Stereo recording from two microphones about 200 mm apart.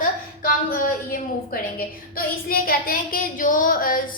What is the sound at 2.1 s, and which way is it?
Child singing, 45° left (ahead or behind).